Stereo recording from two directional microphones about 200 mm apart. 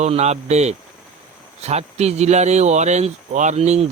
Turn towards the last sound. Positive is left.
turn(degrees=-35)  # may be behind; listen again after turning